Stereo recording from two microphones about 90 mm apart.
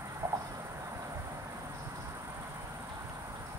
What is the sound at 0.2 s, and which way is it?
Cricket, 30° right (ahead or behind).